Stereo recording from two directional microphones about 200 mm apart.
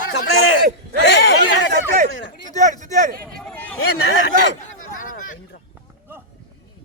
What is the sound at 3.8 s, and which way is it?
Speech, 90° left.